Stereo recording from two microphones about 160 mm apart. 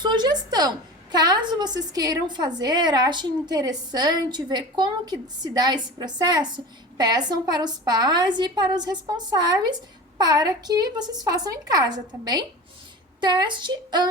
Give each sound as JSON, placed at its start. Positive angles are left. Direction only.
{"t": 0.0, "sound": "a woman's voice", "side_deg": -25}